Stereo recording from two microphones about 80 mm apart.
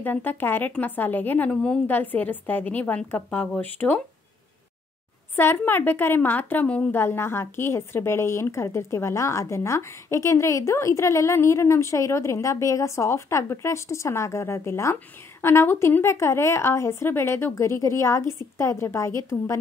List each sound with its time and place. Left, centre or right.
0.0 s a woman's voice: left
1.5 s a woman's voice: centre
1.9 s a woman's voice: left
5.3 s a woman's voice: left
6.9 s a woman's voice: left